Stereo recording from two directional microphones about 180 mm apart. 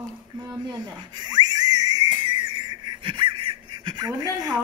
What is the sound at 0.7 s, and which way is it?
Whistle, 25° right (ahead or behind).